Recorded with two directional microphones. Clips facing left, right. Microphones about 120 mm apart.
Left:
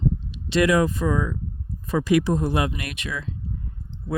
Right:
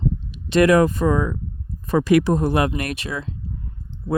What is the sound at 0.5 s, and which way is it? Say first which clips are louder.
Speech: right 4 dB; 55° right (ahead or behind).